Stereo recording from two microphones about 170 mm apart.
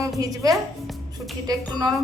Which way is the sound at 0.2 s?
20° right (ahead or behind).